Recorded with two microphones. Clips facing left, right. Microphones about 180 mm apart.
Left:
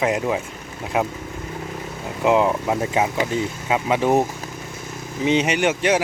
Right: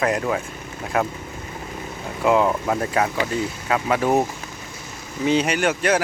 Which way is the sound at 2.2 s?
15° left (ahead or behind).